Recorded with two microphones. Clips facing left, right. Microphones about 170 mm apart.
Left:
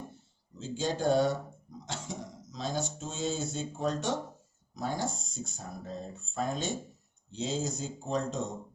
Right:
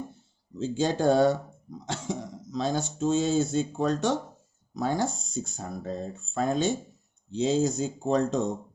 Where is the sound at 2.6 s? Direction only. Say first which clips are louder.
Right 7 dB; 80° right.